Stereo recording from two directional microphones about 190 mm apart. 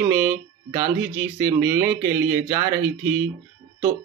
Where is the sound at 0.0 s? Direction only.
15° right (ahead or behind).